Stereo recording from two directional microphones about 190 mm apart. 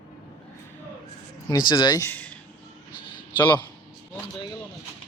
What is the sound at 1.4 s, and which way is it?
Speech, 25° left (ahead or behind).